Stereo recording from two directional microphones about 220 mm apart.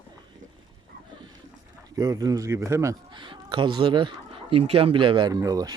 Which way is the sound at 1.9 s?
15° right (ahead or behind).